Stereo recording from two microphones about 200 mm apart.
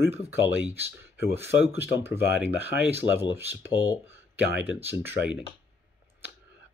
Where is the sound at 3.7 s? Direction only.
20° left (ahead or behind).